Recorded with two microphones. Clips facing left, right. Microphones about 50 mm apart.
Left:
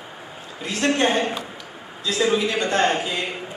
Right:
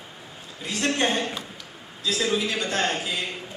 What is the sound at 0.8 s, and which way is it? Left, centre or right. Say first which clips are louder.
A man's voice: left 4 dB; centre.